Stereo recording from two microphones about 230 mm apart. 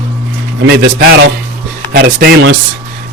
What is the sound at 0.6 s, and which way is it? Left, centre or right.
A man's voice, right.